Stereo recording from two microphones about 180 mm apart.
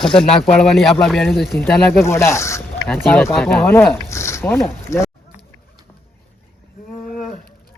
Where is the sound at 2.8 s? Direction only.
5° left (ahead or behind).